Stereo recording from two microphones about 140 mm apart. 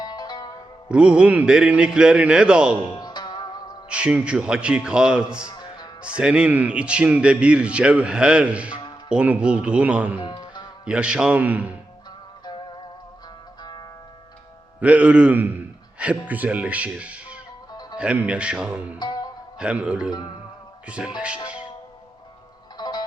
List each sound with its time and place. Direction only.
0.0 s music: 30° left (ahead or behind)
0.9 s speech: 10° right (ahead or behind)
3.0 s music: 30° left (ahead or behind)
3.8 s speech: 10° right (ahead or behind)
5.5 s music: 30° left (ahead or behind)
6.0 s speech: 10° right (ahead or behind)
10.2 s music: 30° left (ahead or behind)
10.8 s speech: 5° right (ahead or behind)
13.6 s music: 30° left (ahead or behind)
14.8 s speech: 10° right (ahead or behind)
18.9 s music: 30° left (ahead or behind)
19.5 s speech: 5° right (ahead or behind)
22.8 s music: 30° left (ahead or behind)